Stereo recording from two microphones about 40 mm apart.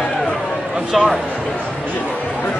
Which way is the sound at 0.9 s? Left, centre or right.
Centre.